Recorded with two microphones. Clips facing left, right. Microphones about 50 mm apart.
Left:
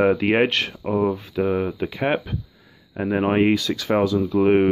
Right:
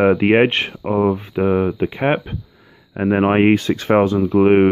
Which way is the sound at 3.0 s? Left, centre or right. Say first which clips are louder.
Right 5 dB; right.